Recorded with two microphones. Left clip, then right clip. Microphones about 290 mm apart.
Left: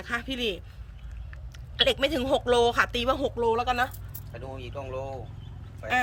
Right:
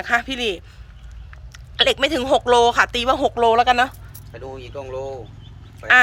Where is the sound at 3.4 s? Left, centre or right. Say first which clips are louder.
Right 11 dB; right.